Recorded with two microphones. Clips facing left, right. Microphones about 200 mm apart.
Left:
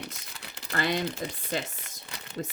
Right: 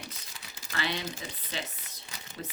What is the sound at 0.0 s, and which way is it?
Crumpling, 60° left (ahead or behind).